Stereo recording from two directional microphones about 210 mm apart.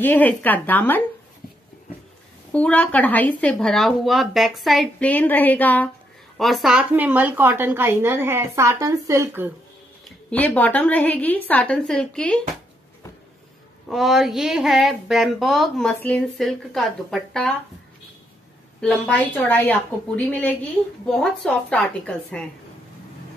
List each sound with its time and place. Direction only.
0.0 s speech: 10° left (ahead or behind)
2.5 s speech: 5° left (ahead or behind); by 9.5 s 10° right (ahead or behind)
10.3 s speech: 10° left (ahead or behind)
13.8 s speech: centre (ahead or behind)
18.8 s speech: 5° left (ahead or behind)